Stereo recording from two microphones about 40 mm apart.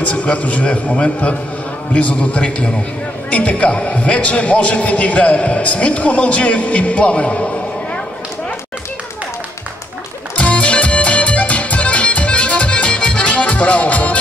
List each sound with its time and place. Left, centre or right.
0.0 s a man's voice: left
10.3 s music: left